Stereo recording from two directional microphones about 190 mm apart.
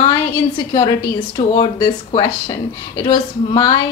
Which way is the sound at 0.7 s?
25° left (ahead or behind).